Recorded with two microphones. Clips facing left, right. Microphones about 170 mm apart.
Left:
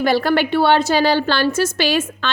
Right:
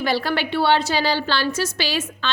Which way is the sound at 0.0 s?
50° left (ahead or behind).